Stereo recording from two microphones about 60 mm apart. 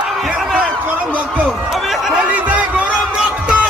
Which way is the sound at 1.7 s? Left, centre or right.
Centre.